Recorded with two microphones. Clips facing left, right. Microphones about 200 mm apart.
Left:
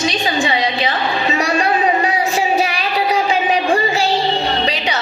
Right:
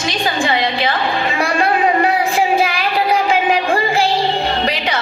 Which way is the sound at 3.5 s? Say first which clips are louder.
Even; 55° right (ahead or behind).